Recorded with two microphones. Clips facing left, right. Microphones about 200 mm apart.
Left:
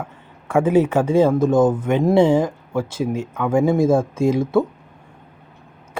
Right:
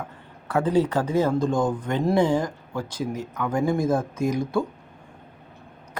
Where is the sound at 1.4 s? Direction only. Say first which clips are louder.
Left 7 dB; 20° left (ahead or behind).